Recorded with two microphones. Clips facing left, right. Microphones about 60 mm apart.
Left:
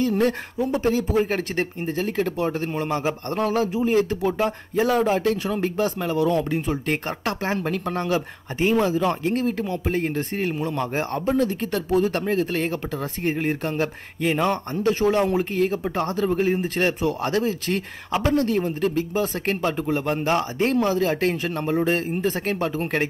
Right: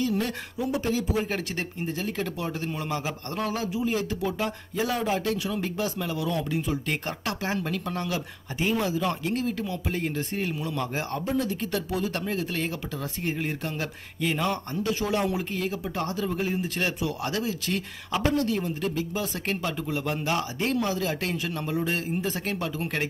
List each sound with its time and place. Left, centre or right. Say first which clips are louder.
0.0 s speech: left 6 dB; left